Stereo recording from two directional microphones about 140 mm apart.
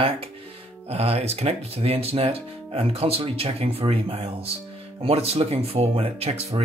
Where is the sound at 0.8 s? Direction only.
45° right (ahead or behind).